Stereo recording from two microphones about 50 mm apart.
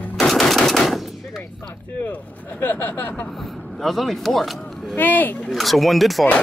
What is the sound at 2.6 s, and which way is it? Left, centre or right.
Speech, left.